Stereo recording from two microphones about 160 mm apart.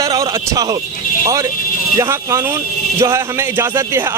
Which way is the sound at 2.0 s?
20° right (ahead or behind).